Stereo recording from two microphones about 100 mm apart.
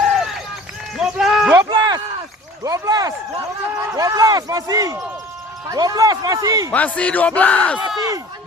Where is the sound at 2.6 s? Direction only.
35° right (ahead or behind).